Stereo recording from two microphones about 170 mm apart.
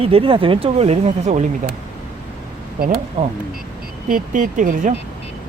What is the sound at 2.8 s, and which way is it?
Speech, 50° right (ahead or behind).